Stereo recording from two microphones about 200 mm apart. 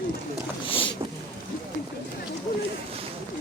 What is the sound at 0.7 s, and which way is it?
Boat, 25° left (ahead or behind).